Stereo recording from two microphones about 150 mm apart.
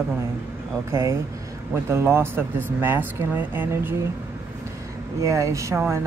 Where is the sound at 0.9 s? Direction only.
20° right (ahead or behind).